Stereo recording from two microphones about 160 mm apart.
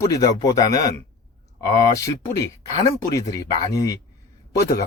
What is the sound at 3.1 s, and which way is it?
Speech, 20° left (ahead or behind).